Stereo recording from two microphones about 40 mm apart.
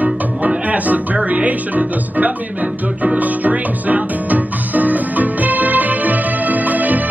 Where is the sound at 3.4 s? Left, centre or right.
Right.